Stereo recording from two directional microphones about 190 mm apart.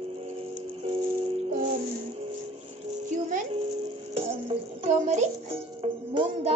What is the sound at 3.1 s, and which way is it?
Music, 40° right (ahead or behind).